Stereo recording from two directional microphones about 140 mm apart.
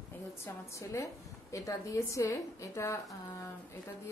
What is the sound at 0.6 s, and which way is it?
A woman's voice, 20° left (ahead or behind).